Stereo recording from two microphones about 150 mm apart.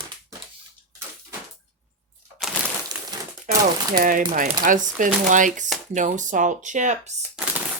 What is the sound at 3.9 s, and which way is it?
Speech, 65° right (ahead or behind).